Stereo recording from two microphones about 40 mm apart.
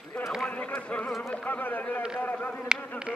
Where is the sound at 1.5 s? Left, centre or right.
Left.